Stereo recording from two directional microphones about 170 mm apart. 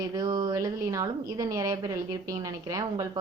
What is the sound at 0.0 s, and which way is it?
A woman's voice, 25° right (ahead or behind).